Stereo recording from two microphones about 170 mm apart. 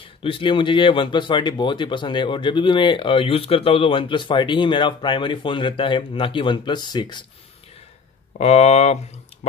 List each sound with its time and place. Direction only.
0.2 s speech: 30° left (ahead or behind)
8.3 s speech: 40° left (ahead or behind)